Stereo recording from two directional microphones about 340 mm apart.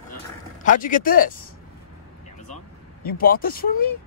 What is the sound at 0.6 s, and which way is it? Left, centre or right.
Speech, left.